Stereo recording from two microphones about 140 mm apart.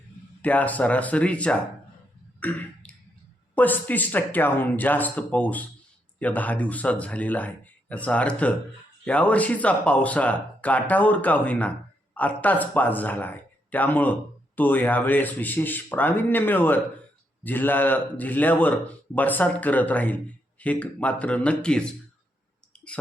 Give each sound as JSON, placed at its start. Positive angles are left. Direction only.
{"t": 0.4, "sound": "speech", "side_deg": 10}
{"t": 2.4, "sound": "throat clearing", "side_deg": 10}
{"t": 3.5, "sound": "speech", "side_deg": 10}